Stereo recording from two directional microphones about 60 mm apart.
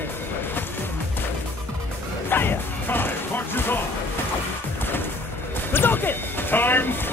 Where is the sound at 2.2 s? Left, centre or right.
Left.